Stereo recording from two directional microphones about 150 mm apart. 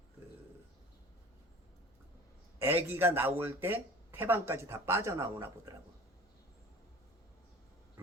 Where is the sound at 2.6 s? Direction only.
15° right (ahead or behind).